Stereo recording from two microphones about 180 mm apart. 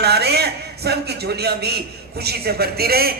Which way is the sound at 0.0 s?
65° right (ahead or behind).